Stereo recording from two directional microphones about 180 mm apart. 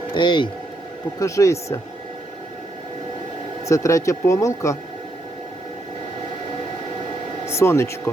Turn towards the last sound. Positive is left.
turn(degrees=15)  # may be behind; listen again after turning